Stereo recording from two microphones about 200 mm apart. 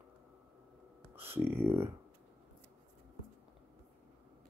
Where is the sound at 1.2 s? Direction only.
10° right (ahead or behind).